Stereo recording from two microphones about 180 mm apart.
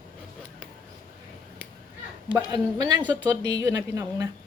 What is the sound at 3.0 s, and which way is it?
Speech, 10° right (ahead or behind).